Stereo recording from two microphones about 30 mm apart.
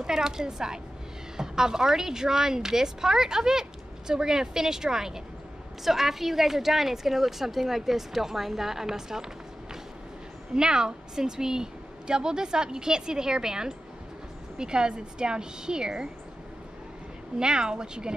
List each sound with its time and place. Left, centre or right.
0.0 s a woman's voice: centre
10.5 s a woman's voice: right
17.4 s a woman's voice: right